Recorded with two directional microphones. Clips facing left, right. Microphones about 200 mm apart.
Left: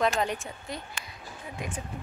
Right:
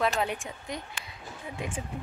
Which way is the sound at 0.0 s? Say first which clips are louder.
Left 1 dB; 5° right (ahead or behind).